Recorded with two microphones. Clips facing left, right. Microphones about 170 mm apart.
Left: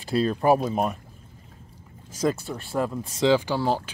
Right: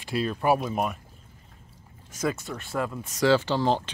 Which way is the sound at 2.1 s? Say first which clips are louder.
Left 4 dB; 35° left (ahead or behind).